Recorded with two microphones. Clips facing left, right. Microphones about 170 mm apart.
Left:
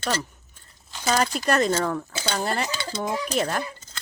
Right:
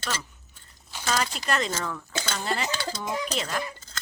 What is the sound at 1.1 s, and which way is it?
Speech, 45° left (ahead or behind).